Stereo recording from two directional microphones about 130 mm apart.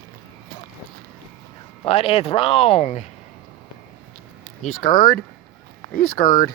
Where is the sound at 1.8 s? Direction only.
50° left (ahead or behind).